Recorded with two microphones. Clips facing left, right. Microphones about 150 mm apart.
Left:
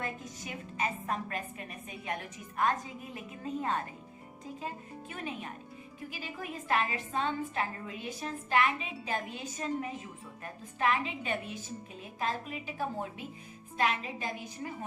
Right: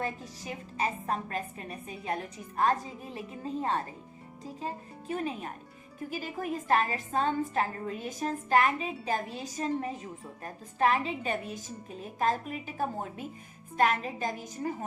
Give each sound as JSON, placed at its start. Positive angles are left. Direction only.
{"t": 0.0, "sound": "a woman's voice", "side_deg": -35}